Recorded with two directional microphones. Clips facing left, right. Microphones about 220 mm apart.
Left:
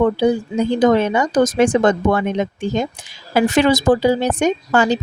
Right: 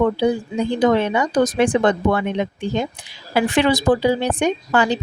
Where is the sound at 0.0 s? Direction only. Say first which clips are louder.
Left 2 dB; 45° left (ahead or behind).